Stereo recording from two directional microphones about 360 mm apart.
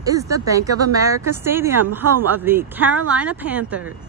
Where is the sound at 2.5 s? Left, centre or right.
Centre.